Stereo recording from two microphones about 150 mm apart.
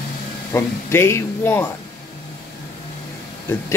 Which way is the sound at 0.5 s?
15° left (ahead or behind).